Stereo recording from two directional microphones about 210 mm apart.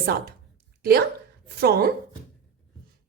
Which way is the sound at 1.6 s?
45° right (ahead or behind).